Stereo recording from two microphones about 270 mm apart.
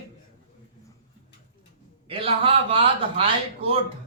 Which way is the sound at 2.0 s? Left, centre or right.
Centre.